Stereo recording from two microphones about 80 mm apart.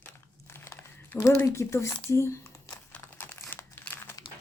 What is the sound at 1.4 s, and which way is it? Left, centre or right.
Speech, left.